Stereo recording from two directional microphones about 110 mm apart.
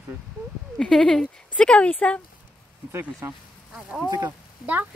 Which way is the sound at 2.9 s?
20° right (ahead or behind).